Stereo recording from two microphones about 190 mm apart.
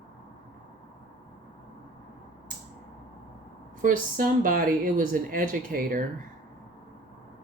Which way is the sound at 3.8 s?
45° right (ahead or behind).